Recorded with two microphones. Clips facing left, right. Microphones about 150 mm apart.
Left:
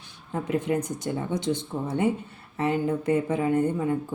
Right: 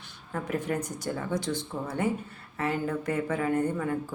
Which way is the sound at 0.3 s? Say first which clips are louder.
Left 4 dB; 20° left (ahead or behind).